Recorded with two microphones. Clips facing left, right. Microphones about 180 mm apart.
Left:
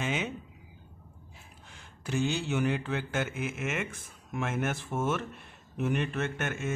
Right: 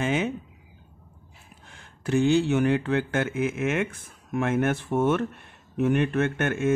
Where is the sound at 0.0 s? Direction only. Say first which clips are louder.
Right 7 dB; 55° right (ahead or behind).